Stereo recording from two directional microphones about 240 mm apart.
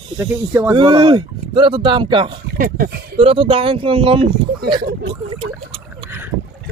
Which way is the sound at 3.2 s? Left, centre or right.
Right.